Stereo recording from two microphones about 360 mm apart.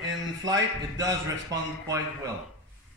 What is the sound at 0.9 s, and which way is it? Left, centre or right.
Speech, centre.